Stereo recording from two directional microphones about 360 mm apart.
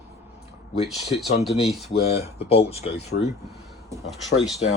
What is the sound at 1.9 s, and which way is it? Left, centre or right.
Speech, centre.